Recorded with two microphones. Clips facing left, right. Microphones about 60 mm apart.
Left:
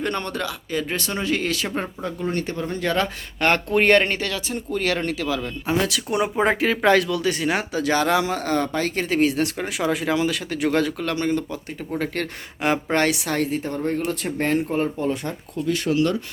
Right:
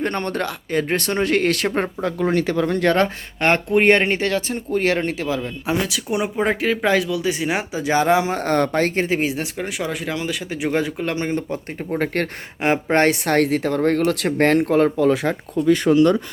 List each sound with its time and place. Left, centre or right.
0.0 s speech: right
2.0 s speech: right
3.4 s speech: right
5.6 s speech: centre; by 8.3 s right
8.3 s speech: right
9.0 s speech: right
9.6 s speech: centre
10.5 s speech: centre
11.0 s speech: right
12.6 s speech: right
13.2 s speech: right